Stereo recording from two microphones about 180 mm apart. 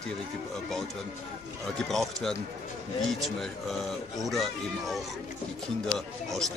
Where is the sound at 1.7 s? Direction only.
Centre (ahead or behind).